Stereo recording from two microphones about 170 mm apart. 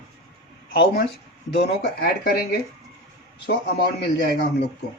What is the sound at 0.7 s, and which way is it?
Speech, 80° left.